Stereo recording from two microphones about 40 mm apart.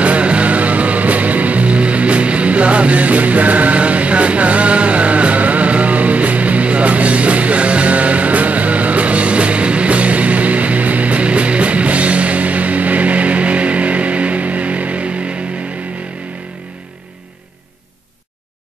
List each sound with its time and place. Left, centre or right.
0.0 s music: right